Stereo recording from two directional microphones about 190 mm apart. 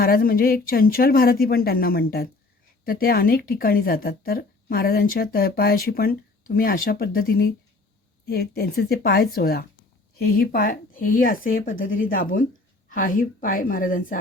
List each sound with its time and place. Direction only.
0.0 s speech: 50° left (ahead or behind)